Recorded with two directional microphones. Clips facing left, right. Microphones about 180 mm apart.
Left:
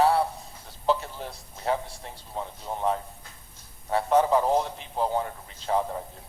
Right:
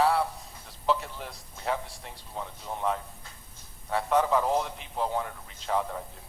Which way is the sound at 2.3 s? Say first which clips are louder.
Left 3 dB; 30° left (ahead or behind).